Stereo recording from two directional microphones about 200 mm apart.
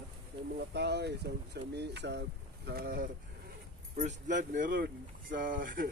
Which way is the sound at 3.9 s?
35° right (ahead or behind).